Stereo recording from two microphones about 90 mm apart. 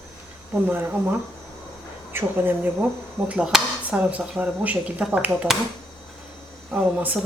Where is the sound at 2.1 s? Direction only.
25° right (ahead or behind).